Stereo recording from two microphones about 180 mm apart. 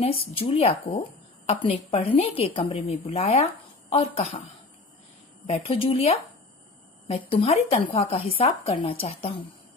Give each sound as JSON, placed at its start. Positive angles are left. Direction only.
{"t": 0.0, "sound": "speech", "side_deg": 30}
{"t": 5.5, "sound": "speech", "side_deg": 35}